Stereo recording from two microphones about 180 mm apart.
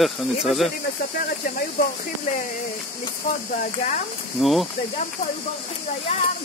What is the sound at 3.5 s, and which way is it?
Speech, 45° left (ahead or behind).